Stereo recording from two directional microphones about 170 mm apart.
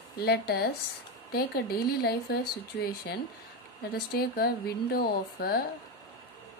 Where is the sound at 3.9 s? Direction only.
65° left (ahead or behind).